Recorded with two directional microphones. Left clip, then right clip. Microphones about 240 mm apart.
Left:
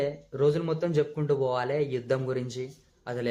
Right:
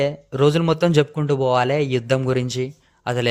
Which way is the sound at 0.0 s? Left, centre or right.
Right.